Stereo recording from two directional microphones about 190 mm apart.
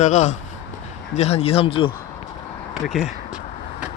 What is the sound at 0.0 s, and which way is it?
Speech, 40° left (ahead or behind).